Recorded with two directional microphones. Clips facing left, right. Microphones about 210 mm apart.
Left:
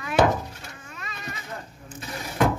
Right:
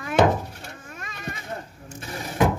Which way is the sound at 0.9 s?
50° right (ahead or behind).